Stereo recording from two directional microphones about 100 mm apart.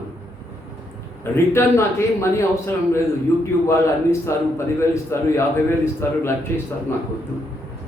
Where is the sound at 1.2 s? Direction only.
25° left (ahead or behind).